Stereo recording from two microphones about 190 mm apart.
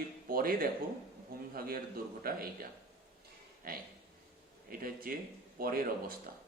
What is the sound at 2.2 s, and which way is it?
Speech, 50° right (ahead or behind).